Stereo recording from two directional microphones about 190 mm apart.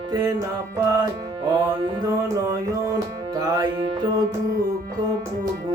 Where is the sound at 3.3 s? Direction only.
20° right (ahead or behind).